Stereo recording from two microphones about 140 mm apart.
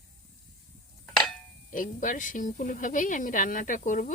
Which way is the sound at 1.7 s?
70° left (ahead or behind).